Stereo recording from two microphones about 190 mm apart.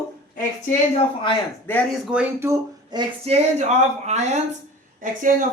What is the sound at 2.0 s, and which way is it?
Speech, 5° right (ahead or behind).